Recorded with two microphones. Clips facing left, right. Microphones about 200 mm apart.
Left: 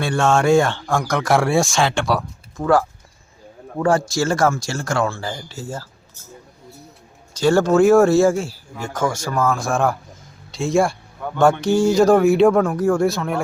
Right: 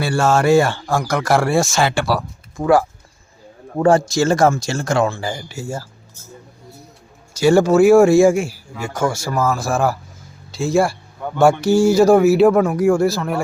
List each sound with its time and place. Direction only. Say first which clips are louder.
0.0 s speech: right 1 dB; 5° right (ahead or behind)
3.8 s speech: right 4 dB; 25° right (ahead or behind)
7.3 s speech: right 2 dB; 10° right (ahead or behind)